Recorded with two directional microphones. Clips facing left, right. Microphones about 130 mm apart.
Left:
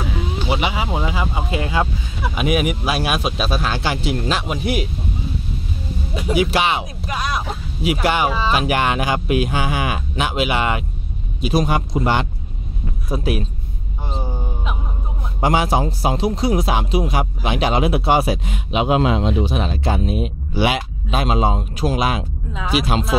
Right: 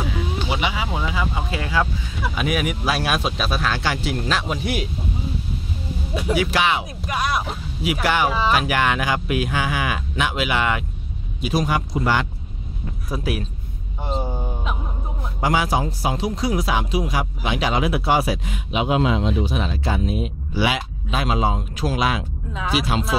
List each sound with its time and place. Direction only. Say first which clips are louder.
0.5 s speech: left 5 dB; 20° left (ahead or behind)
3.3 s speech: left 2 dB; 25° left (ahead or behind)
6.1 s speech: left 2 dB; 15° left (ahead or behind)
7.1 s speech: right 1 dB; 10° right (ahead or behind)
7.8 s speech: left 2 dB; 25° left (ahead or behind)
14.2 s a sound: even; 10° right (ahead or behind)
15.4 s speech: left 3 dB; 25° left (ahead or behind)
18.7 s speech: left 3 dB; 70° left (ahead or behind)
19.2 s speech: left 3 dB; 30° left (ahead or behind)
19.7 s speech: left 3 dB; 55° left (ahead or behind)
21.1 s speech: left 3 dB; 25° left (ahead or behind)
22.5 s speech: left 1 dB; 15° left (ahead or behind)